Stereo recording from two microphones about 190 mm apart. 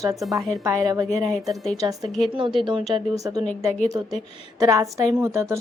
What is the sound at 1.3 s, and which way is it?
Speech, centre (ahead or behind).